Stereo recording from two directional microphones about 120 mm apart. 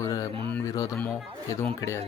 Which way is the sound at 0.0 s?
30° left (ahead or behind).